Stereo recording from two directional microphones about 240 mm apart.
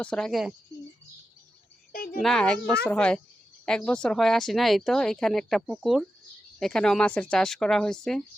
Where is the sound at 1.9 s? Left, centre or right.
Left.